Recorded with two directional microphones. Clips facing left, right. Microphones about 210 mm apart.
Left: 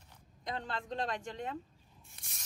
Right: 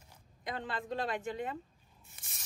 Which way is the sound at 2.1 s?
Centre (ahead or behind).